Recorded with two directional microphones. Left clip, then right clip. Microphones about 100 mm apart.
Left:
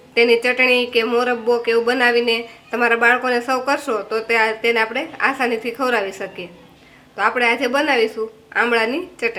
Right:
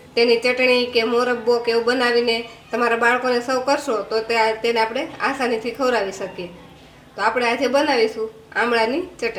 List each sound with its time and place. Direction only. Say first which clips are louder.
0.1 s speech: left 2 dB; 40° left (ahead or behind)